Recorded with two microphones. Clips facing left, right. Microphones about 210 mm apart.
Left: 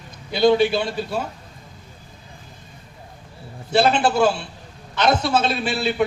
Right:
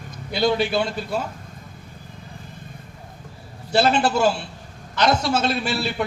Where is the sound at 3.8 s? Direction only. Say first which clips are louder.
Left 1 dB; 55° left (ahead or behind).